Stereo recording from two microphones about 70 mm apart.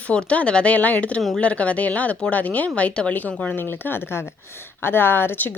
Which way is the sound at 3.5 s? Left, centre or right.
Left.